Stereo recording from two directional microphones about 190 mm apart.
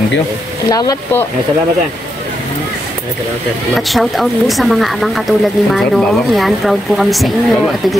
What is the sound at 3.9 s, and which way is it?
Speech, centre (ahead or behind).